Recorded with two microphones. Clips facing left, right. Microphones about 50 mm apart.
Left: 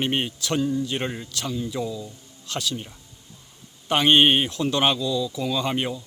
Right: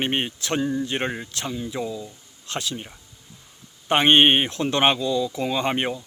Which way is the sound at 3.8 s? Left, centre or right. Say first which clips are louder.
Right 1 dB; right.